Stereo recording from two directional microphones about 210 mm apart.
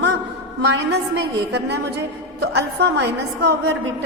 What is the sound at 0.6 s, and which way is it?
A woman's voice, 50° right (ahead or behind).